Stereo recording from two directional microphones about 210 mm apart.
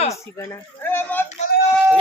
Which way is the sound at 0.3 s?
10° left (ahead or behind).